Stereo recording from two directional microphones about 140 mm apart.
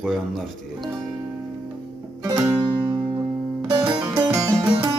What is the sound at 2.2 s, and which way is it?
Music, 30° right (ahead or behind).